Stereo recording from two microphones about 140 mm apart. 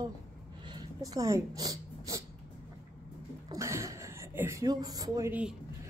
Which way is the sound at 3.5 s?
20° right (ahead or behind).